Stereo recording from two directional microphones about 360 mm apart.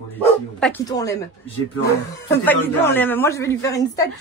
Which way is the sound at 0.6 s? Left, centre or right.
Centre.